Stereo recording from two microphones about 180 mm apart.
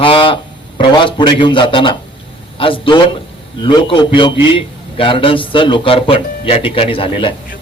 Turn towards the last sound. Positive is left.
turn(degrees=30)  # may be behind; listen again after turning